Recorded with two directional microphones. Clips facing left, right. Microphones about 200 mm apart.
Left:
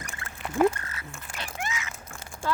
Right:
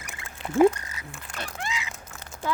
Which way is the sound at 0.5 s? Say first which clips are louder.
Right 4 dB; 15° right (ahead or behind).